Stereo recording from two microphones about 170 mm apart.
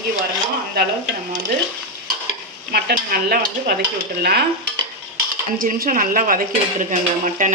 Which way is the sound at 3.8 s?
70° right (ahead or behind).